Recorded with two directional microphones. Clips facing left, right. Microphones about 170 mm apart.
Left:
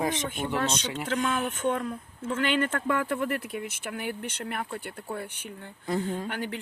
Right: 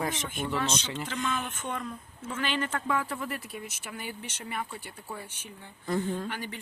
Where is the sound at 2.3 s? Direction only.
55° left (ahead or behind).